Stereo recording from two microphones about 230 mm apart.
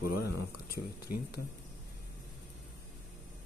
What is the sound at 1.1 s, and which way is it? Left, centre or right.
Speech, left.